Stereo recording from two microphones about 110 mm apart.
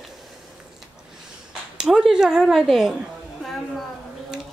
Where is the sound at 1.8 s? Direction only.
5° right (ahead or behind).